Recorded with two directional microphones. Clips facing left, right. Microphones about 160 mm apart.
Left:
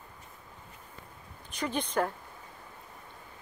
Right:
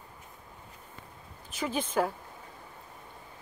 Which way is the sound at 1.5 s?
5° right (ahead or behind).